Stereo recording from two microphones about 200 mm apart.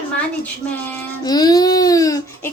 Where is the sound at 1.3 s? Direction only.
20° left (ahead or behind).